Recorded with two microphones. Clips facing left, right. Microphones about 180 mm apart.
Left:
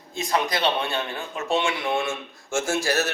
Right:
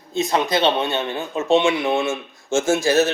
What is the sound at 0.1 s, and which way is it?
Speech, 25° right (ahead or behind).